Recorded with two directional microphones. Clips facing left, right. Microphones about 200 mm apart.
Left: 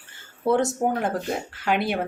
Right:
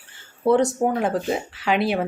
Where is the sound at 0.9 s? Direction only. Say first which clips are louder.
Right 3 dB; centre (ahead or behind).